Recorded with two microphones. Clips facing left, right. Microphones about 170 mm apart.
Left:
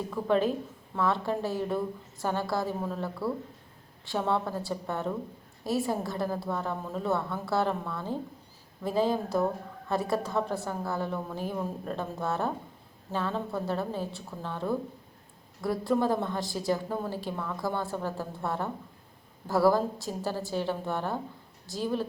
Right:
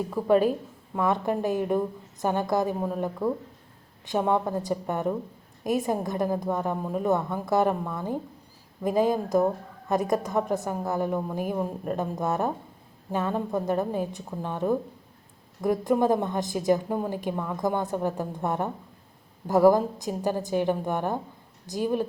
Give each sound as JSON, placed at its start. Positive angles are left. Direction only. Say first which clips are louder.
{"t": 0.3, "sound": "a woman's voice", "louder": "right 5 dB", "side_deg": -10}